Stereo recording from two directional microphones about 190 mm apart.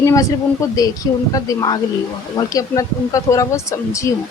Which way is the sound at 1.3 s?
20° left (ahead or behind).